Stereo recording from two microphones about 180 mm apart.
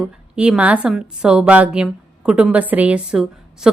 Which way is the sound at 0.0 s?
5° right (ahead or behind).